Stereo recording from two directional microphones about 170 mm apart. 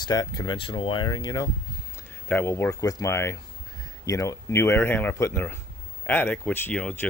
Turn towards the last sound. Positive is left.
turn(degrees=10)  # may be behind; listen again after turning